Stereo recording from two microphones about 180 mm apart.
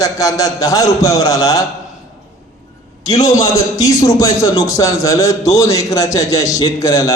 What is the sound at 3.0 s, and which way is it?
A man's voice, 20° left (ahead or behind).